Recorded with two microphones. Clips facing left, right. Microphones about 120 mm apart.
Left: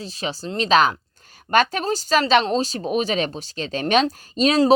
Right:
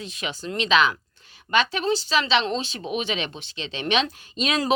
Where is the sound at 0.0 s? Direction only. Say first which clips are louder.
Left 3 dB; 35° left (ahead or behind).